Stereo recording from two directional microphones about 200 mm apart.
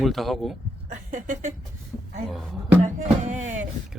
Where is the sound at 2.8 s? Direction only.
35° right (ahead or behind).